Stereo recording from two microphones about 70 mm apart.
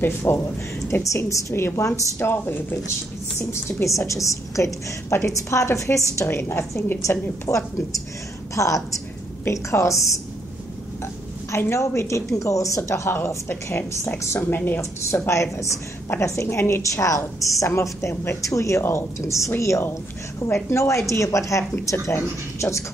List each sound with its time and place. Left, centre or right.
0.0 s a woman's voice: left
0.8 s a woman's voice: left
1.5 s a woman's voice: left
3.3 s a woman's voice: left
11.5 s a woman's voice: left
14.8 s a woman's voice: left